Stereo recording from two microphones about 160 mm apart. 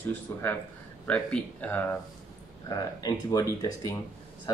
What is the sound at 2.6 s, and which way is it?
Speech, 25° left (ahead or behind).